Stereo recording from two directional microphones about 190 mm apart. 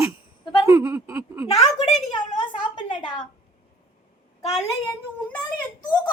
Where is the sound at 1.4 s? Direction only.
35° left (ahead or behind).